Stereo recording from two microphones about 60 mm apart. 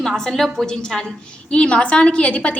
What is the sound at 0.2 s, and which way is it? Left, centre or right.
A woman's voice, centre.